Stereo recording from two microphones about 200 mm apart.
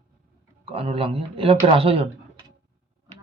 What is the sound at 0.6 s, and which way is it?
Speech, 30° right (ahead or behind).